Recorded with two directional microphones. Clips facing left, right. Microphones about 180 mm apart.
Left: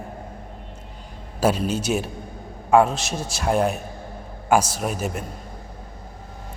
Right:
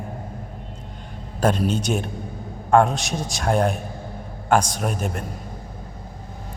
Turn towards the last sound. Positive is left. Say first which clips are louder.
# even
turn(degrees=5)  # may be behind; listen again after turning